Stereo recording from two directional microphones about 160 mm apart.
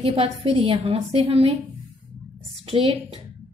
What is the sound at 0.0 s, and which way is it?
A woman's voice, 40° right (ahead or behind).